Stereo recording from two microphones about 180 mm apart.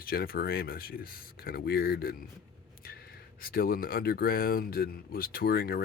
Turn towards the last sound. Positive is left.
turn(degrees=60)  # may be behind; listen again after turning